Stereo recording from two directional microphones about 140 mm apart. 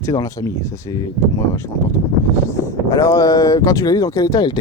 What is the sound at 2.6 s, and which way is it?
Speech, 20° left (ahead or behind).